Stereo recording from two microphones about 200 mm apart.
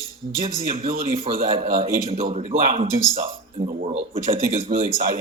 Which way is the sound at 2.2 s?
40° right (ahead or behind).